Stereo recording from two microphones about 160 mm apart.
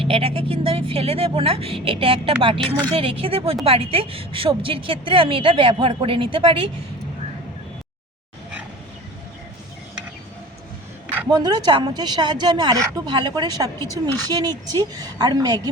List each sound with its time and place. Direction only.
0.0 s a woman's voice: 35° right (ahead or behind)
11.3 s a woman's voice: 25° right (ahead or behind)